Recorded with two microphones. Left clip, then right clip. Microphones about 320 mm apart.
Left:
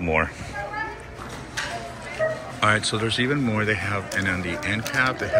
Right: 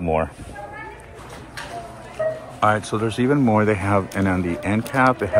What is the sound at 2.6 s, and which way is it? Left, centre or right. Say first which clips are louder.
Speech: right 2 dB; centre.